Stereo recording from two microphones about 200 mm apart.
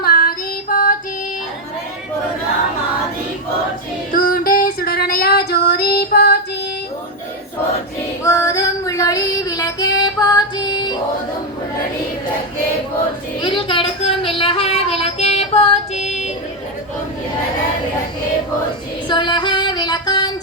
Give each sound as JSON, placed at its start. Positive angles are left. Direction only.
{"t": 0.0, "sound": "music", "side_deg": 45}
{"t": 4.1, "sound": "child singing", "side_deg": 45}
{"t": 8.2, "sound": "female singing", "side_deg": 15}
{"t": 13.4, "sound": "a sound", "side_deg": 25}
{"t": 19.0, "sound": "female singing", "side_deg": 25}